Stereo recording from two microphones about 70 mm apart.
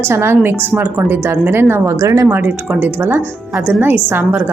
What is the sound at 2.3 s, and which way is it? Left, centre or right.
A woman's voice, right.